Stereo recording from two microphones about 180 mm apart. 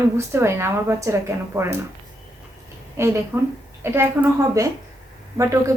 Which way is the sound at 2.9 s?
15° right (ahead or behind).